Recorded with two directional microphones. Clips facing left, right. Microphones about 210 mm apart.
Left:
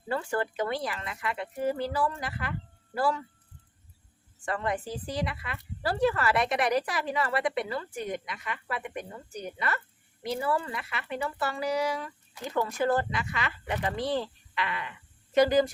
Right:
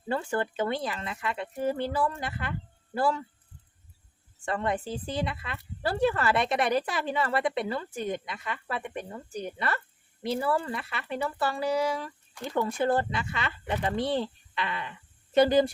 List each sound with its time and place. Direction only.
0.1 s speech: 25° right (ahead or behind)
4.4 s speech: 25° right (ahead or behind)